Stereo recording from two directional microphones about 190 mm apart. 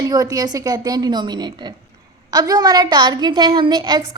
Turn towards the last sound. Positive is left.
turn(degrees=-20)  # may be behind; listen again after turning